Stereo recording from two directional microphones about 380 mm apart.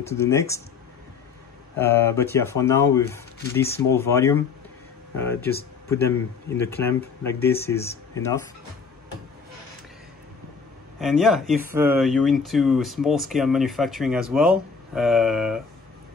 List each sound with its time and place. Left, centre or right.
0.0 s speech: centre
1.8 s speech: centre
11.0 s speech: centre